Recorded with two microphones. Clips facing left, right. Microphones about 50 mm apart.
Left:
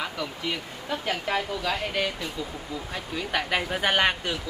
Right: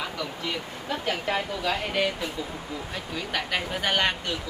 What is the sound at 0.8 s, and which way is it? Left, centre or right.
Speech, centre.